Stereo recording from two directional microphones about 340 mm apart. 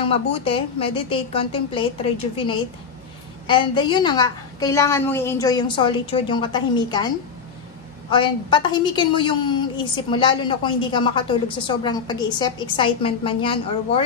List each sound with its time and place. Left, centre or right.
0.0 s a woman's voice: centre
3.4 s a woman's voice: centre